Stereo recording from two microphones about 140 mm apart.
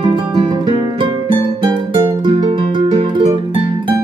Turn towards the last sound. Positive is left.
turn(degrees=-40)  # may be behind; listen again after turning